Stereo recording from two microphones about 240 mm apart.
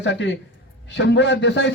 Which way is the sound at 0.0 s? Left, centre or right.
Left.